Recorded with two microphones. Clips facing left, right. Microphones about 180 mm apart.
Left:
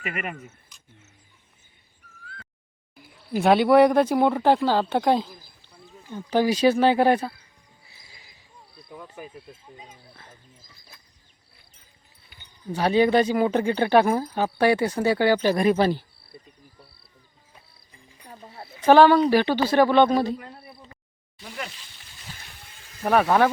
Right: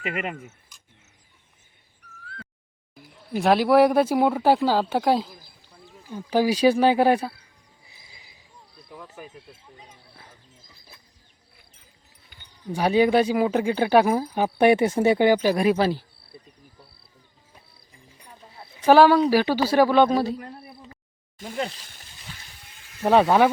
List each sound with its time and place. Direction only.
0.0 s speech: 20° right (ahead or behind)
3.3 s speech: centre (ahead or behind)
7.9 s horse: 20° right (ahead or behind)
8.9 s speech: centre (ahead or behind)
9.3 s speech: 15° left (ahead or behind)
12.7 s speech: 10° right (ahead or behind)
18.3 s a sound: 55° left (ahead or behind)
18.9 s speech: 5° right (ahead or behind)
21.4 s speech: 45° right (ahead or behind)
23.0 s speech: 15° right (ahead or behind)